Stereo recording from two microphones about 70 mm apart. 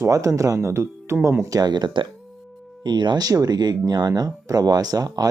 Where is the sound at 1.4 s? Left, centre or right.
Right.